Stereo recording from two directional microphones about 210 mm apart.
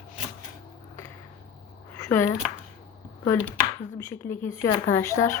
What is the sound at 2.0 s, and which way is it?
Speech, 10° left (ahead or behind).